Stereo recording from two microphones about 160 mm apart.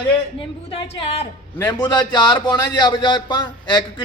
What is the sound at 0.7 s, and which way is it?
Speech, 35° left (ahead or behind).